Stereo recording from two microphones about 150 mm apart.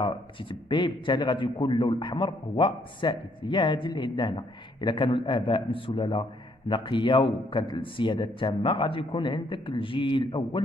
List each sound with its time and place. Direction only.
0.0 s a man's voice: 30° left (ahead or behind)